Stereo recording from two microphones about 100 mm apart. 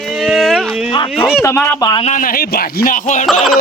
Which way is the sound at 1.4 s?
25° left (ahead or behind).